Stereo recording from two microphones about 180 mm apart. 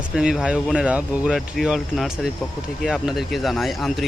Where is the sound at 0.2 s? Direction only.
5° right (ahead or behind).